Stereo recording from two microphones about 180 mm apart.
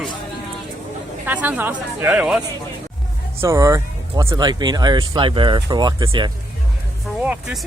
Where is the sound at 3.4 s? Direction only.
15° right (ahead or behind).